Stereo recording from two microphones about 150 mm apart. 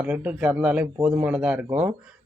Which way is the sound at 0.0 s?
10° right (ahead or behind).